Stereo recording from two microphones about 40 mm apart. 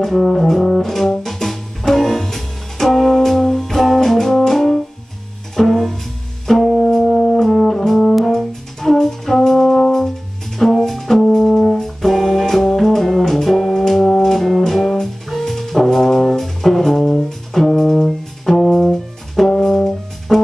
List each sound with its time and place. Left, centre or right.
0.3 s music: centre
6.8 s brass instrument: centre
11.5 s music: centre
14.6 s brass instrument: centre